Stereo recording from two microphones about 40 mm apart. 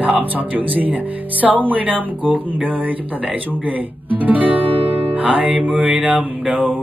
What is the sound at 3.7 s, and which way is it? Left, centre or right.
Speech, right.